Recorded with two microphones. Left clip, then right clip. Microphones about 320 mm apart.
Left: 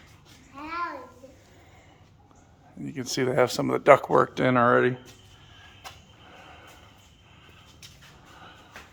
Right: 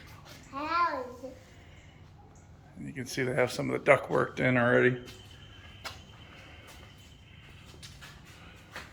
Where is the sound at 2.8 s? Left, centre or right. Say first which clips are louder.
Left 6 dB; centre.